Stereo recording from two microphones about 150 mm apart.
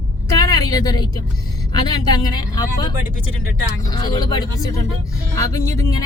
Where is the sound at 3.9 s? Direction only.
30° left (ahead or behind).